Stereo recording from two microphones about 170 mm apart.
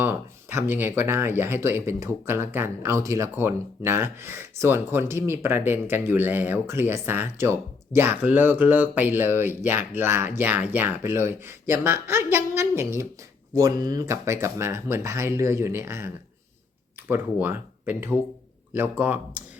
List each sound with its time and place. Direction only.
0.0 s speech: 10° right (ahead or behind)